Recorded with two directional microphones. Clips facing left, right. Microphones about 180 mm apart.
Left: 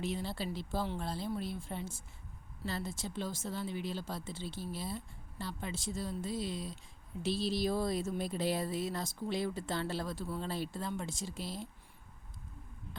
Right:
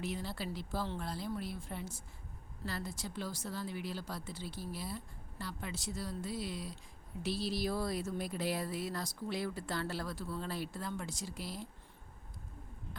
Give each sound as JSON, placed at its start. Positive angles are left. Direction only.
{"t": 0.0, "sound": "speech", "side_deg": 25}